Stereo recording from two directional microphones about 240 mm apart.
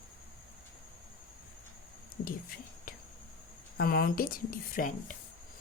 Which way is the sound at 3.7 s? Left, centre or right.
Left.